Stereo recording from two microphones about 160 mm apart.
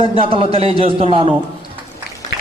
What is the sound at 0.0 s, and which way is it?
A man's voice, 35° right (ahead or behind).